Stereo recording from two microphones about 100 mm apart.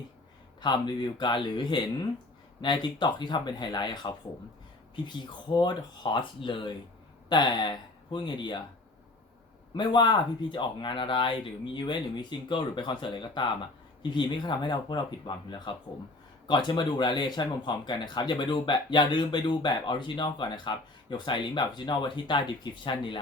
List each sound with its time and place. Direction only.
0.6 s speech: 45° left (ahead or behind)
9.7 s speech: 50° left (ahead or behind)